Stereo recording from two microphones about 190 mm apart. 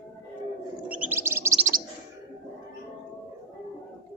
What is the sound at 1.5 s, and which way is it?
Chirp, 40° right (ahead or behind).